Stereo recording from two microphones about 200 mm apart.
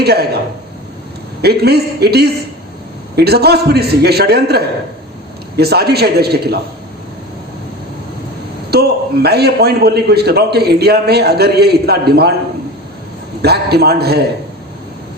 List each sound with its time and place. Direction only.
0.0 s speech: 55° right (ahead or behind)
1.4 s a man's voice: 55° right (ahead or behind)
8.7 s a man's voice: 55° right (ahead or behind)
13.4 s a man's voice: 55° right (ahead or behind)